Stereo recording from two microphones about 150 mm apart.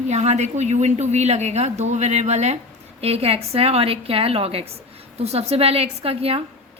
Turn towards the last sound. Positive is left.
turn(degrees=-40)  # may be behind; listen again after turning